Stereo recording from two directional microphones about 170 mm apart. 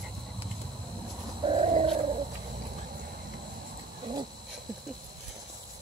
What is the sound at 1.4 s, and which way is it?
Bird, 35° right (ahead or behind).